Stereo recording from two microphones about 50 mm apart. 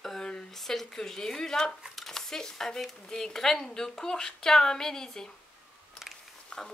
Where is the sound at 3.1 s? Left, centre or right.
Centre.